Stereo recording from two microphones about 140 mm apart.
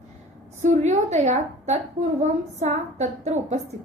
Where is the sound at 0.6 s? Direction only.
55° right (ahead or behind).